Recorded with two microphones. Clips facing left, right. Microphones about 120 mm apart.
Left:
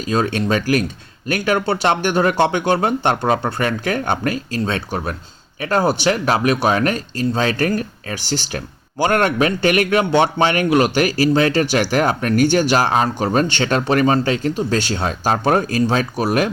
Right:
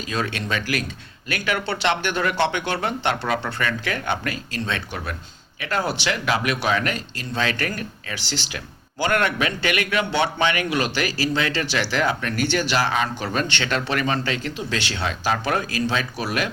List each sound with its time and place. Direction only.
0.1 s speech: 40° left (ahead or behind)